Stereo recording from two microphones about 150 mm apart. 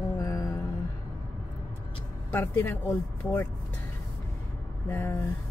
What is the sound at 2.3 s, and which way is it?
Speech, 15° left (ahead or behind).